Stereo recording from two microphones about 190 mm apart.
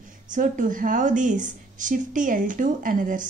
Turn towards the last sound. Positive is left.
turn(degrees=-45)  # may be behind; listen again after turning